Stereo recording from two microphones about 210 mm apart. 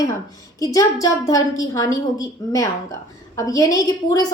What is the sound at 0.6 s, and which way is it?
A woman's voice, 15° left (ahead or behind).